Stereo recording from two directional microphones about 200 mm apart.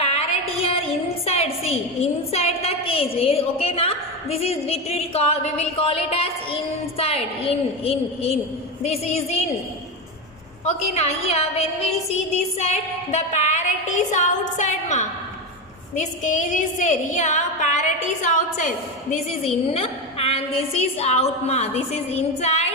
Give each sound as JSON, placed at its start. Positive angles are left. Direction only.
{"t": 0.0, "sound": "a woman's voice", "side_deg": 30}
{"t": 10.7, "sound": "a woman's voice", "side_deg": 30}
{"t": 19.7, "sound": "a woman's voice", "side_deg": 30}